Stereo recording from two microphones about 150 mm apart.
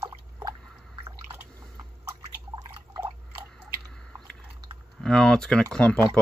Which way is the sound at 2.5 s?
25° right (ahead or behind).